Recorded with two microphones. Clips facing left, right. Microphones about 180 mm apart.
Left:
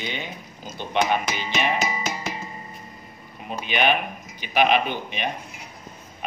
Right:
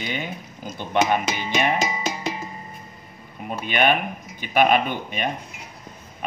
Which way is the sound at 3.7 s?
50° right (ahead or behind).